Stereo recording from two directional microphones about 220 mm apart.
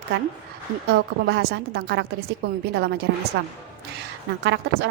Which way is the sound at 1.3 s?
50° right (ahead or behind).